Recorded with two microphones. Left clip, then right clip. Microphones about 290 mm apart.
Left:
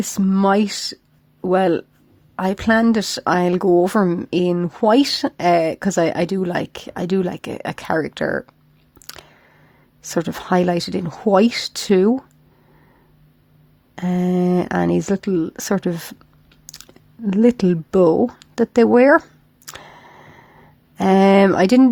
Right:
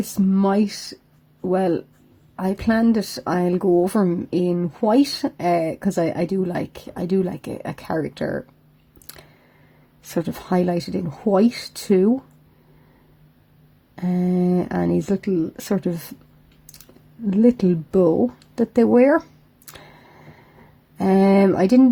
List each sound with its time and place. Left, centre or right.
0.1 s speech: left
9.0 s a sound: left
10.2 s speech: left
13.9 s speech: left
17.4 s speech: left
19.6 s camera: left
20.9 s speech: left